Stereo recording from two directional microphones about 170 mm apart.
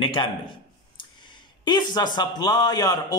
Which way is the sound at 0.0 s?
30° left (ahead or behind).